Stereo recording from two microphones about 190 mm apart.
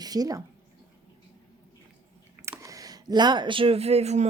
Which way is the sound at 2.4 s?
15° right (ahead or behind).